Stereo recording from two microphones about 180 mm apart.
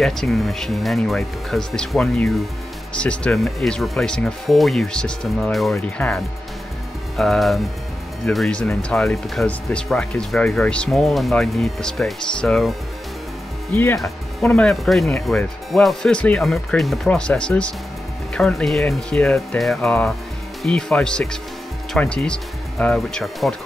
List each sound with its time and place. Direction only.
0.0 s speech: centre (ahead or behind)
13.7 s speech: 15° left (ahead or behind)
14.4 s speech: 5° left (ahead or behind)